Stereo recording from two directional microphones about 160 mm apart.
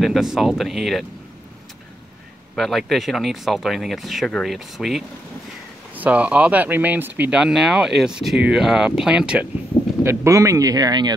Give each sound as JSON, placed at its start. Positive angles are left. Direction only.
{"t": 0.0, "sound": "speech", "side_deg": 0}
{"t": 2.5, "sound": "speech", "side_deg": 0}
{"t": 10.0, "sound": "speech", "side_deg": -20}